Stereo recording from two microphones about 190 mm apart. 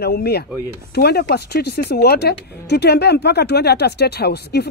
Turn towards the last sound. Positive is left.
turn(degrees=60)  # may be behind; listen again after turning